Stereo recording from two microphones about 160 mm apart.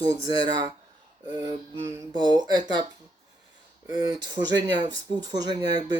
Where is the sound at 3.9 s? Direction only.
25° right (ahead or behind).